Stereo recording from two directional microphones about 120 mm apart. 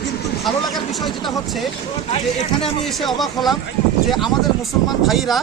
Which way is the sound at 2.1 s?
55° left (ahead or behind).